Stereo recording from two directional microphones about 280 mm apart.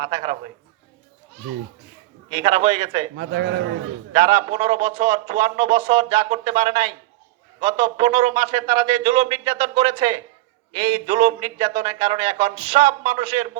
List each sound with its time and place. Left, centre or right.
0.0 s a man's voice: right
2.3 s a man's voice: right
3.2 s a man's voice: right
4.1 s a man's voice: right